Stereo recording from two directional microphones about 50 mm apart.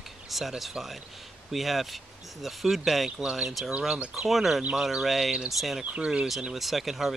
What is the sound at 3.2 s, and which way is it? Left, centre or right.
Speech, centre.